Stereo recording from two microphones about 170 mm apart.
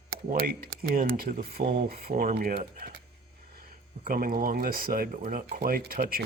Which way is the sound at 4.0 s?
55° right (ahead or behind).